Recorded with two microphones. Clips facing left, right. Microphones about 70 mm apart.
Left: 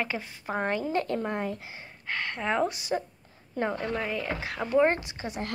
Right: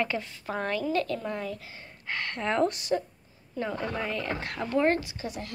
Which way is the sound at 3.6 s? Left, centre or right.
Left.